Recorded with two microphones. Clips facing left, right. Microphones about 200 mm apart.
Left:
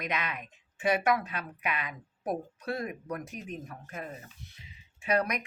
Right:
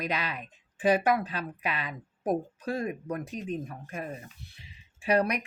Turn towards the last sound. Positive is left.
turn(degrees=-30)  # may be behind; listen again after turning